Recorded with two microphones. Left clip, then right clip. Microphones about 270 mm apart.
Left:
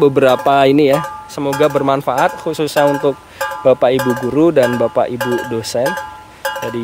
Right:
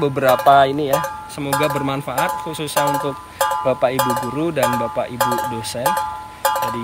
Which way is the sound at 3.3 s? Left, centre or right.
Right.